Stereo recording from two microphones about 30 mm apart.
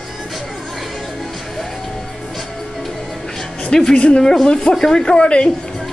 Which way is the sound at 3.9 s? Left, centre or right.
Left.